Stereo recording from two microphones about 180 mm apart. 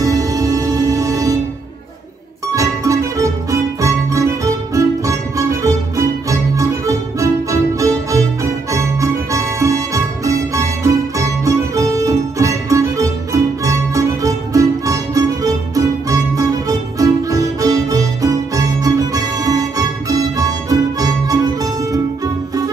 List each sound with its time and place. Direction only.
0.0 s music: 20° right (ahead or behind)
2.5 s music: 20° right (ahead or behind)